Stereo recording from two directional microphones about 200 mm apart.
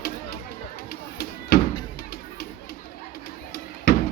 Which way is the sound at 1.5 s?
50° left (ahead or behind).